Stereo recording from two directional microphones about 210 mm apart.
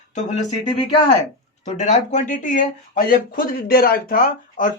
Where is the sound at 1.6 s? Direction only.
35° left (ahead or behind).